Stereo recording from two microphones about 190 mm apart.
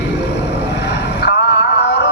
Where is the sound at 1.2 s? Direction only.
60° left (ahead or behind).